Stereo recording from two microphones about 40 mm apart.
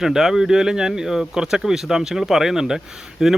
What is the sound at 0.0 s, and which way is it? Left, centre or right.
Speech, centre.